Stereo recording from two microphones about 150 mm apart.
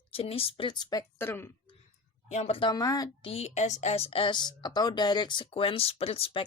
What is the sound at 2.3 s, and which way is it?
Speech, 45° left (ahead or behind).